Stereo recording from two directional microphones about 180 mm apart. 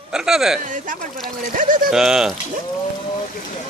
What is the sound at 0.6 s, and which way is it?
Speech, 45° right (ahead or behind).